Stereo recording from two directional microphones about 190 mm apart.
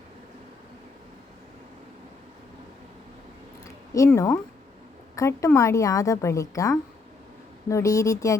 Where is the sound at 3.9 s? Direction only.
15° left (ahead or behind).